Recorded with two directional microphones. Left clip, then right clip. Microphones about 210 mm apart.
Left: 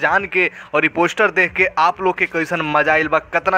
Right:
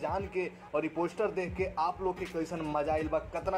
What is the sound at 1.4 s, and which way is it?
Speech, 60° left (ahead or behind).